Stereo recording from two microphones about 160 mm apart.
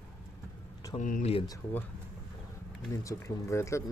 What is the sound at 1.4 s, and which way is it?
Speech, 20° left (ahead or behind).